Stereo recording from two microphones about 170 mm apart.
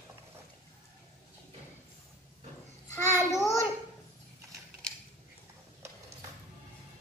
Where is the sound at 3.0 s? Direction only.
20° left (ahead or behind).